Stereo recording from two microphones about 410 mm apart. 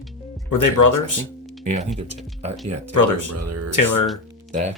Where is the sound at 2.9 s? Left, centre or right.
Left.